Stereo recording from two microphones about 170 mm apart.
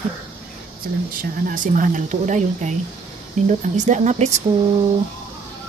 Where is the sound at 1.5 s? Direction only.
50° right (ahead or behind).